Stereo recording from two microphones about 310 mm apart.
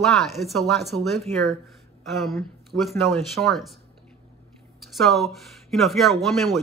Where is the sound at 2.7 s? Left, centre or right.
Centre.